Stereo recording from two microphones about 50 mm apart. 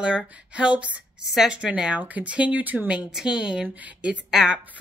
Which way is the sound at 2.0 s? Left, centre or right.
Right.